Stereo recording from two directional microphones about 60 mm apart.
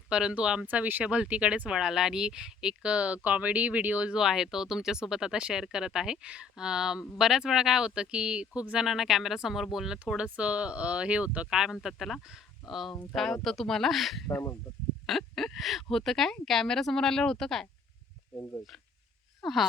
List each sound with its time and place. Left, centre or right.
0.1 s speech: centre
0.7 s speech: right
1.7 s speech: centre
4.2 s speech: centre
8.7 s speech: centre
11.5 s speech: centre
19.4 s speech: centre